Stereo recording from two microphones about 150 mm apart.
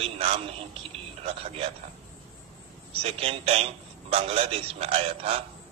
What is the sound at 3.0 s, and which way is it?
A man's voice, 40° right (ahead or behind).